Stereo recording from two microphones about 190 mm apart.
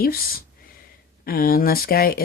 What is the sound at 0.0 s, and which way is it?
Speech, 50° left (ahead or behind).